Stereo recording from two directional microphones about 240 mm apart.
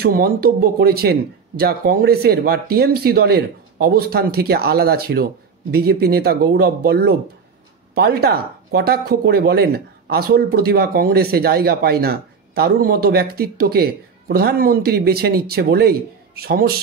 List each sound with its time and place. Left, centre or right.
0.0 s speech: right